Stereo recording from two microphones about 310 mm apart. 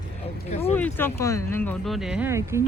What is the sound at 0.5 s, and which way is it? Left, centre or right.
Speech, left.